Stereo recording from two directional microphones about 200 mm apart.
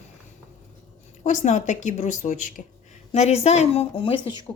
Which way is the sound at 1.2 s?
35° left (ahead or behind).